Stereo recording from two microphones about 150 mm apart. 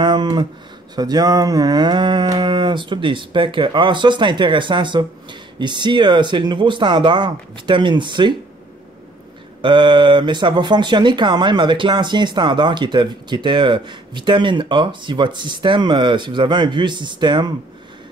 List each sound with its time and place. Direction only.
0.0 s a sound: 30° right (ahead or behind)
0.9 s speech: 25° right (ahead or behind)
9.6 s speech: 30° right (ahead or behind)